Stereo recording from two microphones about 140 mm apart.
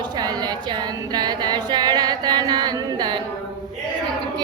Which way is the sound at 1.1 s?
30° right (ahead or behind).